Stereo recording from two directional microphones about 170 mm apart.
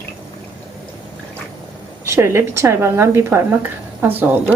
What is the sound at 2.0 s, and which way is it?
Speech, 15° right (ahead or behind).